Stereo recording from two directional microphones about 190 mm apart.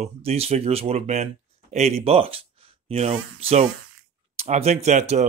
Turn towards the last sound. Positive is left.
turn(degrees=-35)  # may be behind; listen again after turning